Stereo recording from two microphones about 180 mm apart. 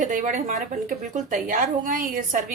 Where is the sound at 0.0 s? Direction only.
45° right (ahead or behind).